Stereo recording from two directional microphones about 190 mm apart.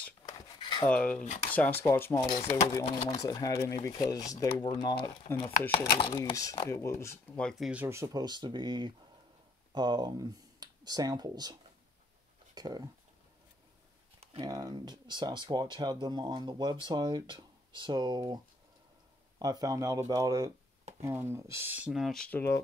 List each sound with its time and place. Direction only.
0.3 s cutlery: 20° left (ahead or behind)
0.8 s speech: 5° left (ahead or behind)
2.7 s speech: 25° left (ahead or behind); by 11.5 s 20° right (ahead or behind)
12.5 s speech: 20° right (ahead or behind)
14.2 s a sound: 30° right (ahead or behind)
14.5 s speech: 20° right (ahead or behind); by 22.6 s 10° left (ahead or behind)